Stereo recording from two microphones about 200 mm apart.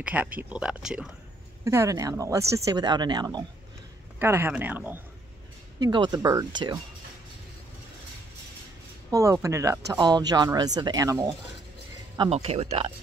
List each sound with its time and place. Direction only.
0.0 s speech: 5° right (ahead or behind)
1.6 s speech: 15° right (ahead or behind)
5.8 s speech: 20° right (ahead or behind)
9.1 s speech: 15° right (ahead or behind)
12.2 s speech: 30° right (ahead or behind)